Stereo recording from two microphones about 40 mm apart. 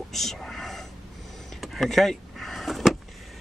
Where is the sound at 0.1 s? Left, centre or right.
Centre.